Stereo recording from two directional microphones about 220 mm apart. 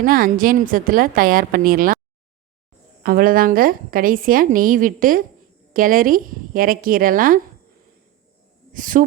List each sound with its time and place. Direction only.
0.0 s a woman's voice: 40° right (ahead or behind)
3.0 s a woman's voice: 40° right (ahead or behind)
8.7 s speech: 35° right (ahead or behind)